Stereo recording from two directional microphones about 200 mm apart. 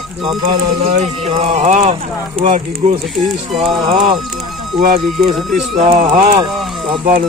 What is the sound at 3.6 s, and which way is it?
Speech, 25° right (ahead or behind).